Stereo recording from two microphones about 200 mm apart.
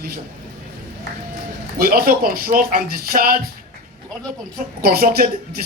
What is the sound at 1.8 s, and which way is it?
Speech, 50° right (ahead or behind).